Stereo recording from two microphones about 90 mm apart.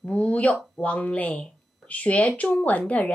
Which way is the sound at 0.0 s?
15° left (ahead or behind).